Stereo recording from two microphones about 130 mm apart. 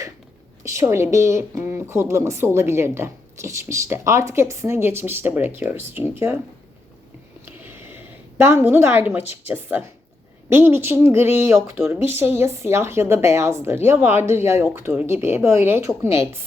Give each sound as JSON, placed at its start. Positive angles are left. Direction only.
{"t": 0.6, "sound": "a woman's voice", "side_deg": -20}
{"t": 7.4, "sound": "a woman's voice", "side_deg": -15}